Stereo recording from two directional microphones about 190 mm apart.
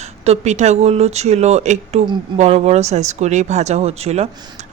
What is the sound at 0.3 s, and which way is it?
Speech, 35° right (ahead or behind).